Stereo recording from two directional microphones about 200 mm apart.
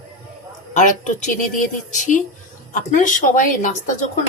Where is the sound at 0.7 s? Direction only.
40° left (ahead or behind).